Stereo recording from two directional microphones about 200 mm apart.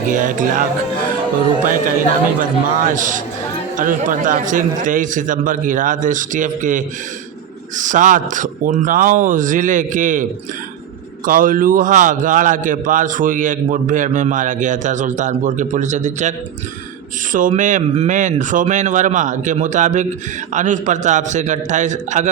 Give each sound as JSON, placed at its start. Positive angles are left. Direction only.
{"t": 0.1, "sound": "a man's voice", "side_deg": -40}
{"t": 2.4, "sound": "a man's voice", "side_deg": -40}
{"t": 11.3, "sound": "a man's voice", "side_deg": -45}
{"t": 17.3, "sound": "a man's voice", "side_deg": -40}